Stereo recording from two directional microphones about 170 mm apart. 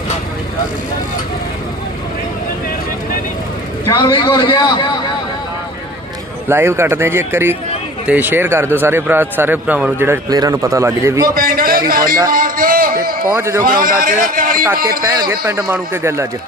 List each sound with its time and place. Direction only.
3.9 s a man's voice: 25° left (ahead or behind)
6.5 s speech: 15° right (ahead or behind)
11.3 s speech: 60° right (ahead or behind)
12.3 s a sound: 55° right (ahead or behind)
13.3 s speech: 15° right (ahead or behind)
13.6 s speech: 60° right (ahead or behind)
15.0 s speech: 25° right (ahead or behind)